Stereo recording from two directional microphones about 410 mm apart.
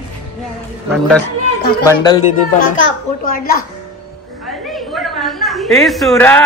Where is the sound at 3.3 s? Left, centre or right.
Left.